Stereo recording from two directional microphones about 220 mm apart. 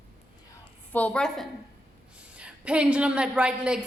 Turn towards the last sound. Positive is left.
turn(degrees=-5)  # may be behind; listen again after turning